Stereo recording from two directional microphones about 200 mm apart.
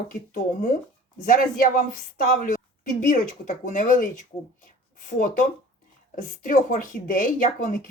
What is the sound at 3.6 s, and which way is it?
A child's voice, 40° left (ahead or behind).